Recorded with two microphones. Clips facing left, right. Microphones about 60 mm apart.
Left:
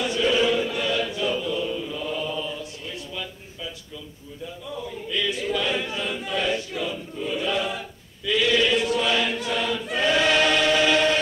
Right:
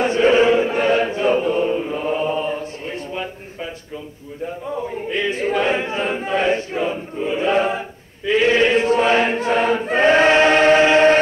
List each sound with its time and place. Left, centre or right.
0.0 s chant: right
4.5 s chant: right